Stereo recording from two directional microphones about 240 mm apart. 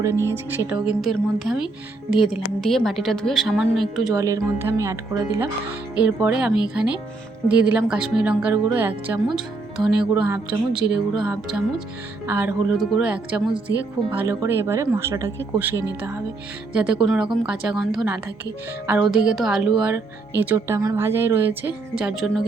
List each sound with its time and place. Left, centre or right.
0.0 s a woman's voice: centre
4.1 s speech: centre
6.0 s a woman's voice: centre
16.7 s a woman's voice: centre